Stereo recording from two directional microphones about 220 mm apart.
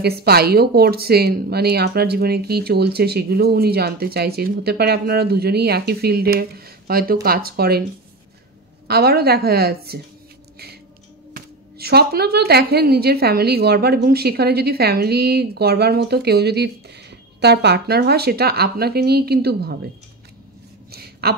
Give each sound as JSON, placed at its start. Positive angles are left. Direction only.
{"t": 0.0, "sound": "a woman's voice", "side_deg": -45}
{"t": 8.8, "sound": "a woman's voice", "side_deg": -45}
{"t": 11.3, "sound": "a woman's voice", "side_deg": -45}
{"t": 20.9, "sound": "a sound", "side_deg": -45}